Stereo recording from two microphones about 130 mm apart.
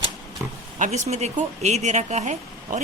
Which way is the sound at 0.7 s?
70° right (ahead or behind).